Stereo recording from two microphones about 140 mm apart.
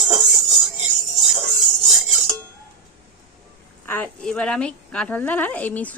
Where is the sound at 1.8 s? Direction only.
Centre (ahead or behind).